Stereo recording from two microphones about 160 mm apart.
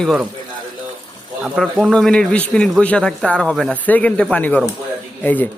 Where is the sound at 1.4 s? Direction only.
Centre (ahead or behind).